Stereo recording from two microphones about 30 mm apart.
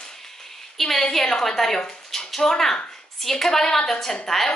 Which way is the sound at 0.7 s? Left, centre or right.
Centre.